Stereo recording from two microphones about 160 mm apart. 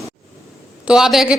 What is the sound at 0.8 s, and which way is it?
Speech, 5° right (ahead or behind).